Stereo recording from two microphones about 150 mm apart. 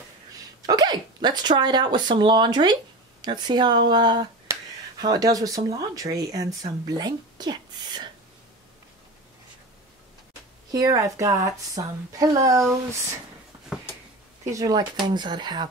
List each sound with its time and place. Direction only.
0.6 s speech: 25° right (ahead or behind)
10.7 s speech: 25° right (ahead or behind)
14.4 s speech: 20° right (ahead or behind)